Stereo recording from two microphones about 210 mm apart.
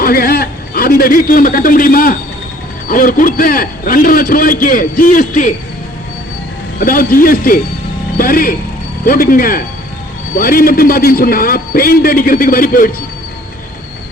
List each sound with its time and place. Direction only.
0.0 s a man's voice: 45° left (ahead or behind)
6.7 s a man's voice: 40° left (ahead or behind)